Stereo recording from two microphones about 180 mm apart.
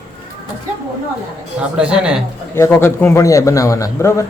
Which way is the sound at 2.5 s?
15° left (ahead or behind).